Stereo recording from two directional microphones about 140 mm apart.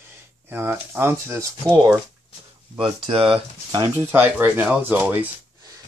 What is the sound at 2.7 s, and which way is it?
Speech, 40° right (ahead or behind).